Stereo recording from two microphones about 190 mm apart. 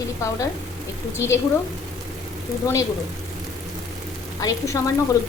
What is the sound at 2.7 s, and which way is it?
Speech, 15° left (ahead or behind).